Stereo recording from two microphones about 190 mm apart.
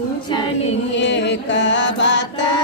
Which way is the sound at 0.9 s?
70° left (ahead or behind).